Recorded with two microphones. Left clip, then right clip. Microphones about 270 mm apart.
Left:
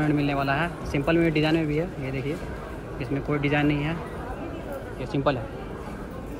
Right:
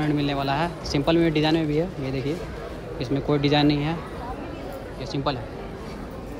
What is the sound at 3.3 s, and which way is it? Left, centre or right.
Speech, centre.